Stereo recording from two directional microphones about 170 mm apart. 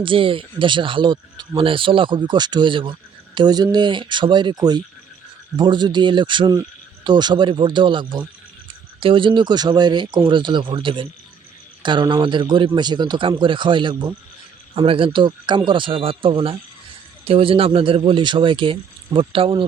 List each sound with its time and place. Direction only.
0.0 s speech: 30° right (ahead or behind)